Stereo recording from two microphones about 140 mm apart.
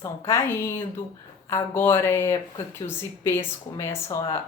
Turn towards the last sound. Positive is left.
turn(degrees=20)  # may be behind; listen again after turning